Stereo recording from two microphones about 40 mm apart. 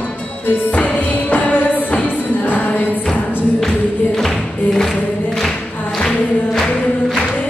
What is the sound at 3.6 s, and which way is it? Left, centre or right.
Music, centre.